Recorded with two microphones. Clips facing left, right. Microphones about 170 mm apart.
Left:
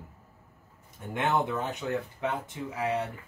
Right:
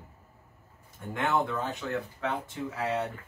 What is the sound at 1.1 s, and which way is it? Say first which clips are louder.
Speech: left 1 dB; 20° left (ahead or behind).